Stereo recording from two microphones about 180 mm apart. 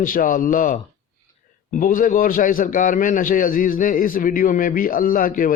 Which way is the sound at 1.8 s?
50° left (ahead or behind).